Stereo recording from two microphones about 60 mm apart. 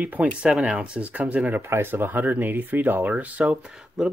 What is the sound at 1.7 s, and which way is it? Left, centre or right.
Speech, right.